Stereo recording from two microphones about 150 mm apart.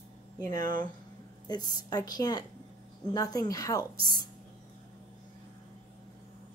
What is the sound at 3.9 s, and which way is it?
Speech, 80° right.